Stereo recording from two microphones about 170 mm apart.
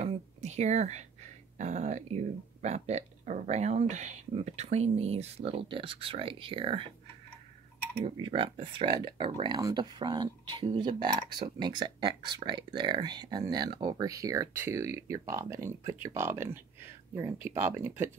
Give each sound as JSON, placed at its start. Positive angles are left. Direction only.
{"t": 0.0, "sound": "speech", "side_deg": -40}
{"t": 8.0, "sound": "speech", "side_deg": -30}